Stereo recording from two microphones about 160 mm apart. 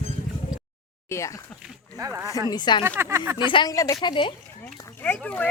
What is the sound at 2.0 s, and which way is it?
Speech, 15° right (ahead or behind).